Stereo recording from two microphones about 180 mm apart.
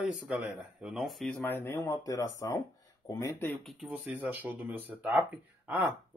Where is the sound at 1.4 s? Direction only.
10° left (ahead or behind).